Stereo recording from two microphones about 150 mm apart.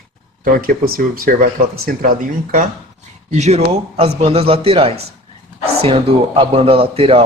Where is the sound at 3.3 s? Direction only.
50° right (ahead or behind).